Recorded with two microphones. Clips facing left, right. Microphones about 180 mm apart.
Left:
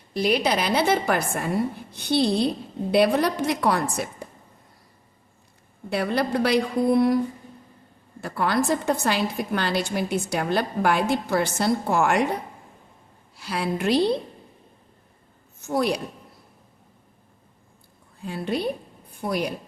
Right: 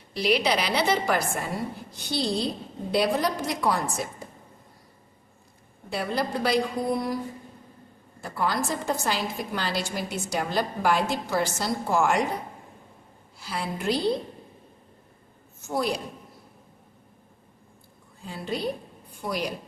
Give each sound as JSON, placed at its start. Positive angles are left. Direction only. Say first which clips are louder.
{"t": 0.1, "sound": "a woman's voice", "louder": "left 2 dB", "side_deg": 50}
{"t": 5.9, "sound": "a woman's voice", "louder": "left 4 dB", "side_deg": 65}
{"t": 8.2, "sound": "a woman's voice", "louder": "left 4 dB", "side_deg": 65}
{"t": 13.3, "sound": "a woman's voice", "louder": "left 5 dB", "side_deg": 65}
{"t": 15.6, "sound": "a woman's voice", "louder": "left 4 dB", "side_deg": 65}
{"t": 18.3, "sound": "a woman's voice", "louder": "left 4 dB", "side_deg": 60}